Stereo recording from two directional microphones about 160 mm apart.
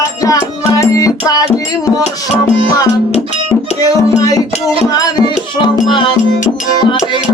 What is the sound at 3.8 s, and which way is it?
Music, 20° left (ahead or behind).